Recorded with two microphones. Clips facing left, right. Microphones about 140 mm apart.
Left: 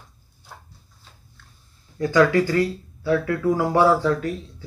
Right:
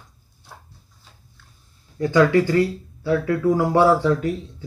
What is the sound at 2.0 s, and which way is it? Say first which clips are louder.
Speech: right 1 dB; 25° right (ahead or behind).